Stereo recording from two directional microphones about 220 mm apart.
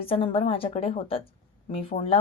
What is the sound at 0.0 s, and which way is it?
A woman's voice, 25° left (ahead or behind).